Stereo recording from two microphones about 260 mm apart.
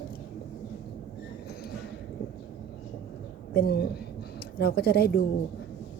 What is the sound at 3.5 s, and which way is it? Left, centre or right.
Speech, left.